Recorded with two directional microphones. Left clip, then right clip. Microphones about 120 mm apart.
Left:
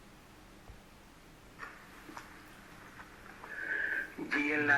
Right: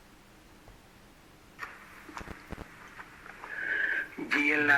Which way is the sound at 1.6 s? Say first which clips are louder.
Right 5 dB; 25° right (ahead or behind).